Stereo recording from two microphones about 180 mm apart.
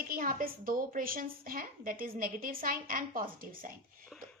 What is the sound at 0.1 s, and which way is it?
A woman's voice, 50° right (ahead or behind).